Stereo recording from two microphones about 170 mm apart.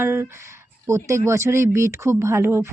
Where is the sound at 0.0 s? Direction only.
15° right (ahead or behind).